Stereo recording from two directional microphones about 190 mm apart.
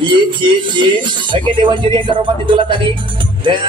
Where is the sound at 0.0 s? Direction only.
25° right (ahead or behind).